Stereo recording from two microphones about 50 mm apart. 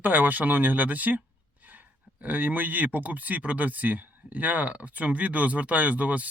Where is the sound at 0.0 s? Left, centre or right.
Right.